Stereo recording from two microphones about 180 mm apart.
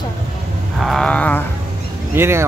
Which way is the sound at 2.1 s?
15° right (ahead or behind).